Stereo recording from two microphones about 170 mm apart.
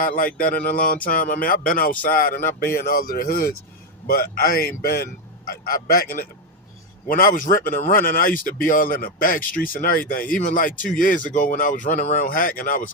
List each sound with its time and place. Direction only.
0.3 s speech: 55° left (ahead or behind)